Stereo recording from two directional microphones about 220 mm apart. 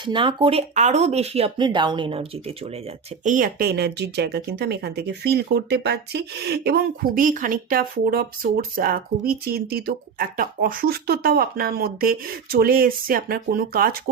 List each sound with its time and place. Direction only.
0.0 s speech: 20° right (ahead or behind)
3.2 s speech: 40° right (ahead or behind)